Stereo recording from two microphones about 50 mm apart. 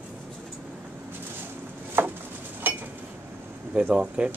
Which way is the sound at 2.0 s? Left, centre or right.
Right.